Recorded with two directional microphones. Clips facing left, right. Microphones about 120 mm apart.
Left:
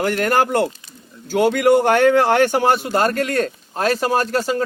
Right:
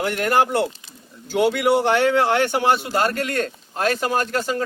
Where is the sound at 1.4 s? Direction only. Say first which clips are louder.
Left 3 dB; 50° left (ahead or behind).